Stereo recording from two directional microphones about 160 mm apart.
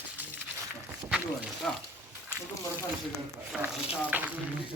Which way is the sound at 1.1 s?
5° right (ahead or behind).